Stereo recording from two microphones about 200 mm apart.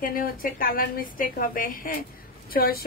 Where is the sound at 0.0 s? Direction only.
45° left (ahead or behind).